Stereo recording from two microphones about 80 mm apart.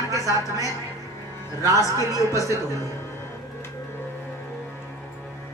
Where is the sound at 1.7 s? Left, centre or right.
Left.